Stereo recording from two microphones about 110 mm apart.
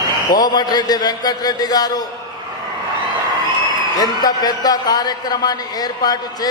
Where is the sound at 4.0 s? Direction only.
35° left (ahead or behind).